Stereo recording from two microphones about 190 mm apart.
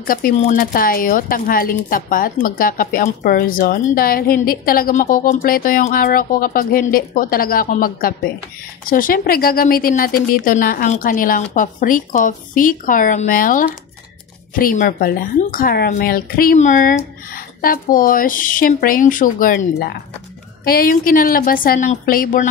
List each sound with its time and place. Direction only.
0.0 s speech: 50° left (ahead or behind)